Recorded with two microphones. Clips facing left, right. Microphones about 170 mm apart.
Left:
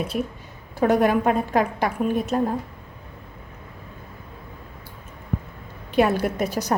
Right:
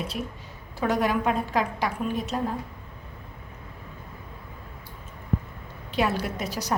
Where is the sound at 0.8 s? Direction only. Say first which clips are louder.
Left 6 dB; 55° left (ahead or behind).